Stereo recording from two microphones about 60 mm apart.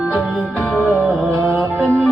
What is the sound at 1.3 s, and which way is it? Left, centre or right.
Music, right.